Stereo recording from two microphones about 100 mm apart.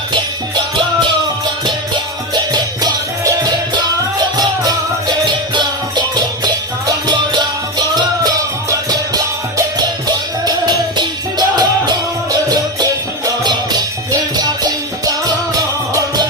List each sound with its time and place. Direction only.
2.3 s music: 45° right (ahead or behind)
6.4 s music: 45° right (ahead or behind)
8.9 s music: 40° right (ahead or behind)